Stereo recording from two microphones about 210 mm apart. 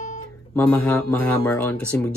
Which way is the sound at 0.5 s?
5° left (ahead or behind).